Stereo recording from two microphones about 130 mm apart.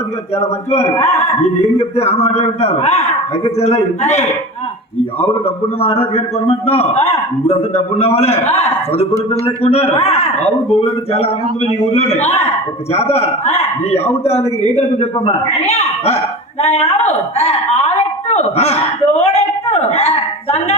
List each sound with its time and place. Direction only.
0.3 s a man's voice: 55° left (ahead or behind)
0.9 s speech: 20° left (ahead or behind)
1.4 s a man's voice: 55° left (ahead or behind)
5.8 s a man's voice: 50° left (ahead or behind)